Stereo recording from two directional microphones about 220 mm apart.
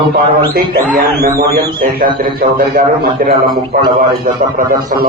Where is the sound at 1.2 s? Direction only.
45° right (ahead or behind).